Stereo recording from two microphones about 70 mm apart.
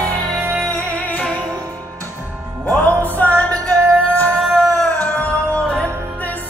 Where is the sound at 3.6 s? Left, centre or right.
Right.